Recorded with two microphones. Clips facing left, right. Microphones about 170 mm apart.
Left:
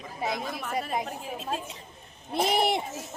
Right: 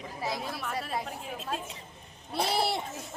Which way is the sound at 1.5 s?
Centre (ahead or behind).